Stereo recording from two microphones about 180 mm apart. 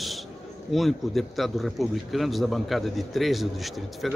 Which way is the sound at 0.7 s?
Centre (ahead or behind).